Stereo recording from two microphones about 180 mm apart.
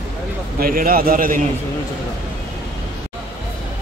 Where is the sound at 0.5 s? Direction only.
55° right (ahead or behind).